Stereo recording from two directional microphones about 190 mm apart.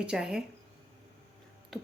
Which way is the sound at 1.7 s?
Centre (ahead or behind).